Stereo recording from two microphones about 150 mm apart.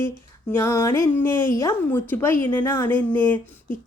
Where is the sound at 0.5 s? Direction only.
15° left (ahead or behind).